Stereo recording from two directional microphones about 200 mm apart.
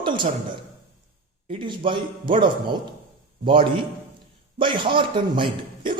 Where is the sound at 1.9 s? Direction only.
25° right (ahead or behind).